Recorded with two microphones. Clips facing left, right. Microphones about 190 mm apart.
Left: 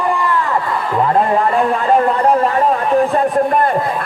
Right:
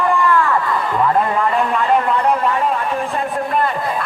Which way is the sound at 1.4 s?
40° left (ahead or behind).